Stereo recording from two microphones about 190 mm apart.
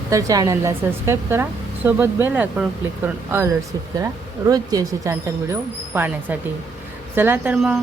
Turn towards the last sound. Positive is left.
turn(degrees=-5)  # may be behind; listen again after turning